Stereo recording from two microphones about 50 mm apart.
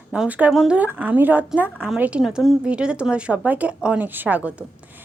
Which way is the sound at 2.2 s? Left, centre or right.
Centre.